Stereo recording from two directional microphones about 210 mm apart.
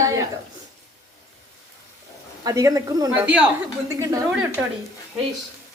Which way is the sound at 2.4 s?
15° right (ahead or behind).